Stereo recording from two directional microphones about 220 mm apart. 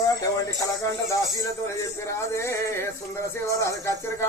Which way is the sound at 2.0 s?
10° left (ahead or behind).